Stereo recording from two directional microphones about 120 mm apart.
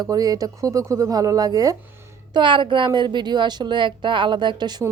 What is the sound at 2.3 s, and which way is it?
Speech, 40° right (ahead or behind).